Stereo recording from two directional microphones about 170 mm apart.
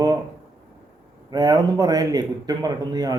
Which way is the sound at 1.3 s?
20° right (ahead or behind).